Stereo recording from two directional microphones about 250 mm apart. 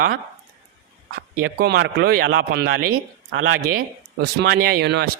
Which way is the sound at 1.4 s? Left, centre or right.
Right.